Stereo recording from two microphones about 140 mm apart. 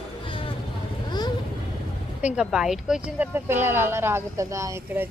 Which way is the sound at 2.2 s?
5° right (ahead or behind).